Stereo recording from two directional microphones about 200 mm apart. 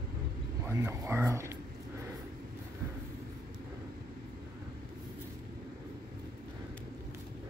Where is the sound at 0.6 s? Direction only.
15° right (ahead or behind).